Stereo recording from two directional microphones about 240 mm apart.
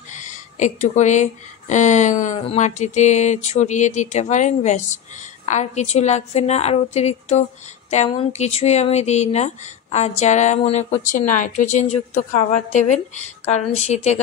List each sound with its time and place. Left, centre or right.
0.1 s speech: left